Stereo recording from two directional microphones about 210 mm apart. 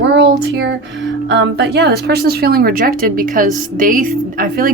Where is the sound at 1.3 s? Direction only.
55° right (ahead or behind).